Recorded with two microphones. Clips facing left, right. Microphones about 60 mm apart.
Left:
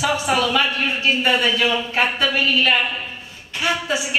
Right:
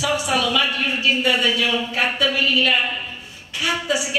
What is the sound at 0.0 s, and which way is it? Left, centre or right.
A woman's voice, left.